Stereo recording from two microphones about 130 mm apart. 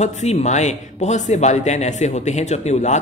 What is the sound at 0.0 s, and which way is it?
Speech, 60° left (ahead or behind).